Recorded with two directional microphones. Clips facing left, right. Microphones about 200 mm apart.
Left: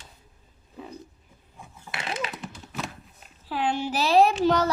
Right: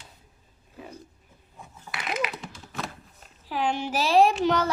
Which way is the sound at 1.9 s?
30° left (ahead or behind).